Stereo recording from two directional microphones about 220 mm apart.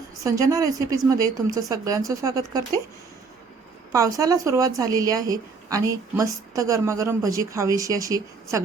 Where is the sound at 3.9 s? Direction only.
15° right (ahead or behind).